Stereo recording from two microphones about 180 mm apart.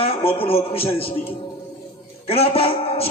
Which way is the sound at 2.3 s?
30° left (ahead or behind).